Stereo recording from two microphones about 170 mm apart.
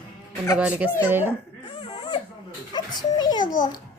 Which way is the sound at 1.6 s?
30° left (ahead or behind).